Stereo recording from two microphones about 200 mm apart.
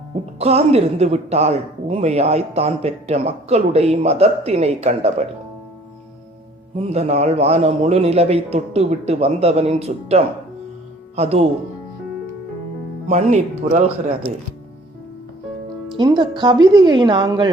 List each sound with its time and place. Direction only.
0.3 s a woman's voice: 30° right (ahead or behind)
6.9 s a woman's voice: 30° right (ahead or behind)
13.1 s a woman's voice: 35° right (ahead or behind)
16.0 s speech: 20° right (ahead or behind)